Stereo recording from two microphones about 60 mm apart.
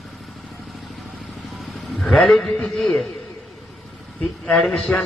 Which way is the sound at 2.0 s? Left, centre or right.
Centre.